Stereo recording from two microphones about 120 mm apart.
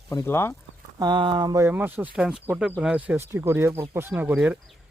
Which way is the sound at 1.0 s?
40° right (ahead or behind).